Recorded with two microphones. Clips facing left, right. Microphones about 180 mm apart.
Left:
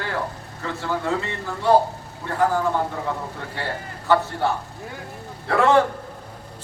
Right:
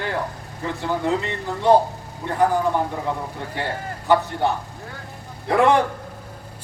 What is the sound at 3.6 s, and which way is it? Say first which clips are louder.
Speech: right 2 dB; 15° right (ahead or behind).